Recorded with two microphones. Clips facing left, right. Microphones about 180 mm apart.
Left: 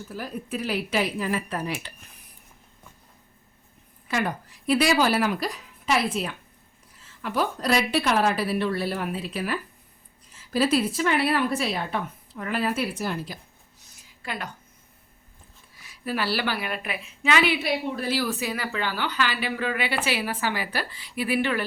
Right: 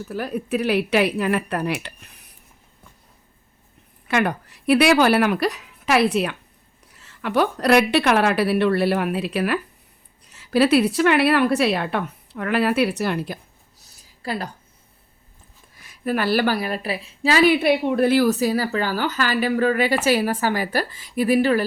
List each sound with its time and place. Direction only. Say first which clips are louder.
0.1 s a woman's voice: right 8 dB; 70° right (ahead or behind)
4.1 s a woman's voice: right 6 dB; 70° right (ahead or behind)
13.7 s a sound: right 1 dB; 35° right (ahead or behind)
15.8 s a woman's voice: right 6 dB; 50° right (ahead or behind)